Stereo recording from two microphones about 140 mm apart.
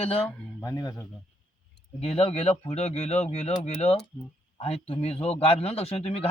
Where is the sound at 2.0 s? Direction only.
45° left (ahead or behind).